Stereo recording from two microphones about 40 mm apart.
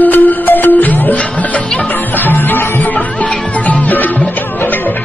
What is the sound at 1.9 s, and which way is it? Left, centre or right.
Music, left.